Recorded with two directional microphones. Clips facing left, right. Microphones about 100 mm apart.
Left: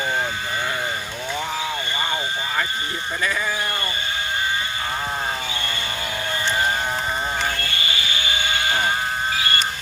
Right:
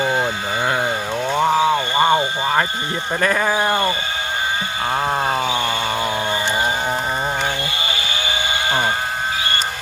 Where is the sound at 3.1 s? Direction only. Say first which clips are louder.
Right 7 dB; 50° right (ahead or behind).